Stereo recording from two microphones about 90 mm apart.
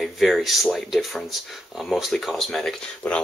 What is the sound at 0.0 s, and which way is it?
Speech, centre (ahead or behind).